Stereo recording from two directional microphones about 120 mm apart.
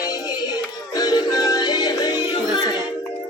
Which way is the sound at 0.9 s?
30° left (ahead or behind).